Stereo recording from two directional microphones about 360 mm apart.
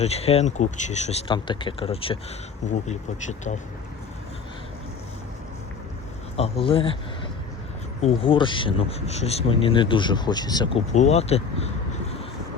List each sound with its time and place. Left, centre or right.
0.0 s speech: centre
6.3 s speech: centre
8.0 s speech: centre